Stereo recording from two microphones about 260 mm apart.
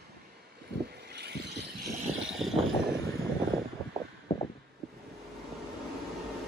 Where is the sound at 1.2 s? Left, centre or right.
Right.